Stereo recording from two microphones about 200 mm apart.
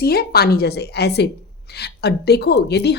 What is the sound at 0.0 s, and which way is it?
A woman's voice, 50° left (ahead or behind).